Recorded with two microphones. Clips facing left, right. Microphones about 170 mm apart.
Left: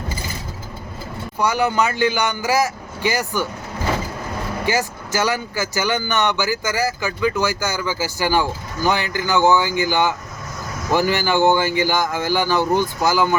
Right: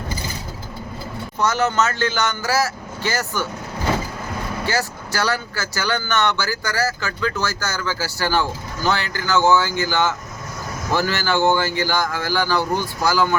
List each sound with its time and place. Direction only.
1.4 s speech: 10° left (ahead or behind)
4.6 s speech: 15° left (ahead or behind)